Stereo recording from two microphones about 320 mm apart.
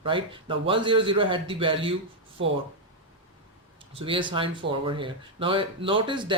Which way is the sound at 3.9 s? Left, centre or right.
Centre.